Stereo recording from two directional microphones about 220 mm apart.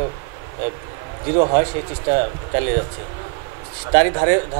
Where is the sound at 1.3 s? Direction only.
30° right (ahead or behind).